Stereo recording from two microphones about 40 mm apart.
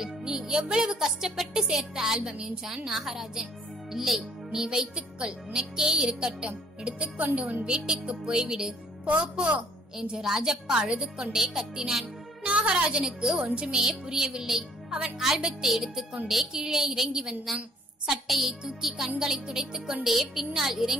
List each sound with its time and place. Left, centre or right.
0.0 s a woman's voice: centre
2.2 s a woman's voice: right; by 4.3 s centre
4.5 s a woman's voice: centre
7.3 s a woman's voice: right
10.2 s a woman's voice: centre
11.3 s a woman's voice: centre
12.4 s a woman's voice: right
13.0 s a woman's voice: centre
15.9 s a woman's voice: centre
16.3 s a woman's voice: centre
18.1 s a woman's voice: centre